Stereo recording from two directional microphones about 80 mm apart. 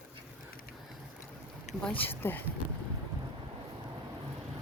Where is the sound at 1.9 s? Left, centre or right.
Left.